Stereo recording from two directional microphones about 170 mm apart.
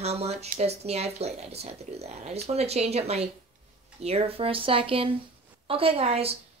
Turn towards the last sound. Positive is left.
turn(degrees=-35)  # may be behind; listen again after turning